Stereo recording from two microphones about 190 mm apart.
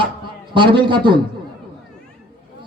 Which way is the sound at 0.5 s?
25° right (ahead or behind).